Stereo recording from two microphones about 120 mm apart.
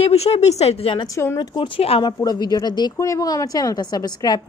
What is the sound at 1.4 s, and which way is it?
Speech, 45° left (ahead or behind).